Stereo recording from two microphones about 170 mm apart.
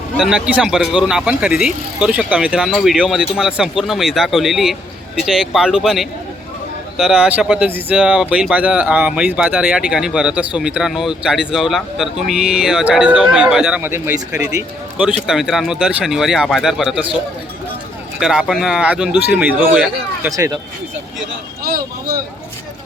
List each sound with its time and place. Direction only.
0.2 s speech: 5° right (ahead or behind)
18.2 s speech: 5° right (ahead or behind); by 20.6 s 20° right (ahead or behind)